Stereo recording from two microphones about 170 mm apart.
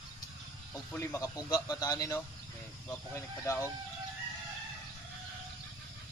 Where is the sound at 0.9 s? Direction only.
15° left (ahead or behind).